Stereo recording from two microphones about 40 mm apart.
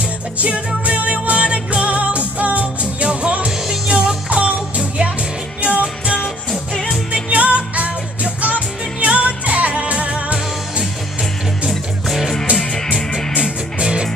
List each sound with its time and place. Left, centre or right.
0.0 s music: right
7.2 s music: right
12.1 s music: centre
12.5 s music: centre
13.4 s music: right